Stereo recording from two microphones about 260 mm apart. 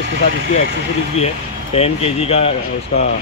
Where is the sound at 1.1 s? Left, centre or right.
Left.